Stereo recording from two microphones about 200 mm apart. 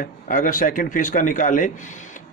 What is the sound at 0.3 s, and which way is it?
Speech, 40° left (ahead or behind).